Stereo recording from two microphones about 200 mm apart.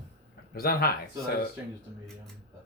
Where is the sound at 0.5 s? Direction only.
50° left (ahead or behind).